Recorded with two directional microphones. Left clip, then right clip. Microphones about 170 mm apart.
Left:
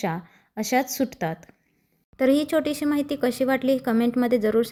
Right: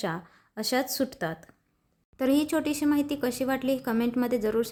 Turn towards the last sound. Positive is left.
turn(degrees=15)  # may be behind; listen again after turning